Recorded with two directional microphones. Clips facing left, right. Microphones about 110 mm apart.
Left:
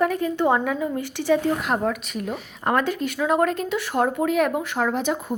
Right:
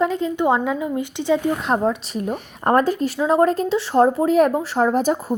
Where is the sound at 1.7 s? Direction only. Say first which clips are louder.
Right 4 dB; 30° right (ahead or behind).